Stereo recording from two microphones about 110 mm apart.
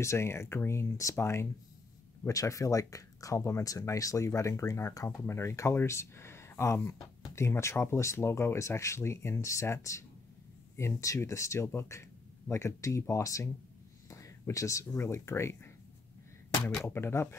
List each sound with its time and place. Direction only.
0.0 s speech: 25° left (ahead or behind)
16.8 s speech: 25° left (ahead or behind)